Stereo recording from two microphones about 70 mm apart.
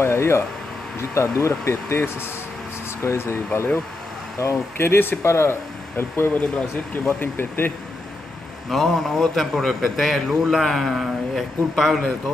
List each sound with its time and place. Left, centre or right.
0.0 s speech: left
4.4 s speech: left
4.7 s speech: left
8.6 s a man's voice: centre